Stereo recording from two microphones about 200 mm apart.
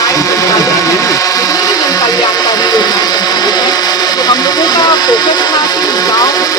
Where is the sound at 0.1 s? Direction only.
15° left (ahead or behind).